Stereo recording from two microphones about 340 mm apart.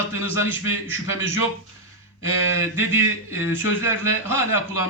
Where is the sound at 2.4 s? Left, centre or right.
Right.